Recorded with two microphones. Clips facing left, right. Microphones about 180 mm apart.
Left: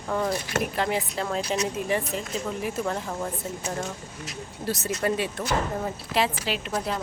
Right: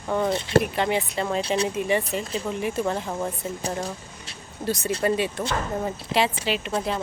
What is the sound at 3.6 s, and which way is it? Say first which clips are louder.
Speech: right 4 dB; 35° right (ahead or behind).